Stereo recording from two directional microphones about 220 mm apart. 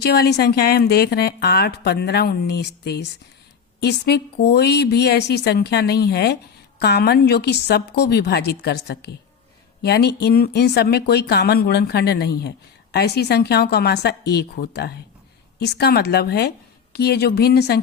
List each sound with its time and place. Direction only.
0.0 s speech: 45° left (ahead or behind)